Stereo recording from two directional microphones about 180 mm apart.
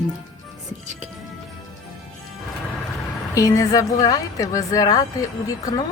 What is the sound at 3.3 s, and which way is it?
A woman's voice, 20° left (ahead or behind).